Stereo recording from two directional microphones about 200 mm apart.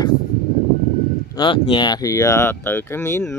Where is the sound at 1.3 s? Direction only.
25° left (ahead or behind).